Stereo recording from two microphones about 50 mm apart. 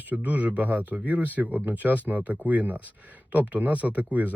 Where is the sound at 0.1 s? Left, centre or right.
Right.